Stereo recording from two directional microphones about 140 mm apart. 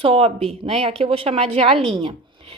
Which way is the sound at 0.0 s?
45° right (ahead or behind).